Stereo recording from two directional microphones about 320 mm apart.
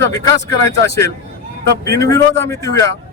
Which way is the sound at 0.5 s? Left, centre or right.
Centre.